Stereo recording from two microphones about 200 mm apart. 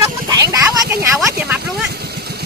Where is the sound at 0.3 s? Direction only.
15° right (ahead or behind).